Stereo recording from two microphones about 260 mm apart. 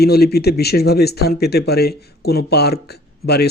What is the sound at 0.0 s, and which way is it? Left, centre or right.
Speech, left.